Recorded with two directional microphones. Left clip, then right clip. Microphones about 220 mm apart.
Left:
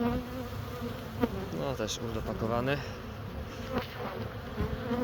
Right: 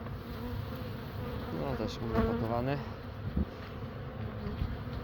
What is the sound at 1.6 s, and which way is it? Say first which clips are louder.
Speech: left 3 dB; 15° left (ahead or behind).